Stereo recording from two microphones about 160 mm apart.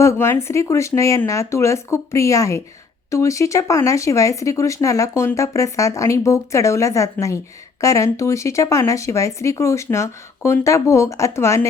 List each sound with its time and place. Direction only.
0.0 s speech: 15° left (ahead or behind)